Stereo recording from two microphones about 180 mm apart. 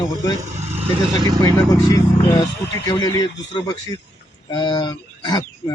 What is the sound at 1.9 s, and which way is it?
A man's voice, 20° left (ahead or behind).